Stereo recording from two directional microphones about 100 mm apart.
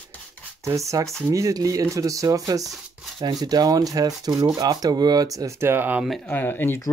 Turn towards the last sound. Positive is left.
turn(degrees=20)  # may be behind; listen again after turning